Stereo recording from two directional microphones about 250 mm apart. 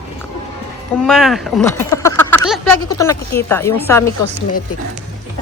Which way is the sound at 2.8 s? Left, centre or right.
Centre.